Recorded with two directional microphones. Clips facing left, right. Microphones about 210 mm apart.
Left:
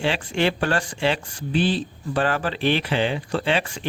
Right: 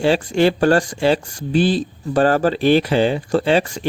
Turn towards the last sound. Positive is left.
turn(degrees=-40)  # may be behind; listen again after turning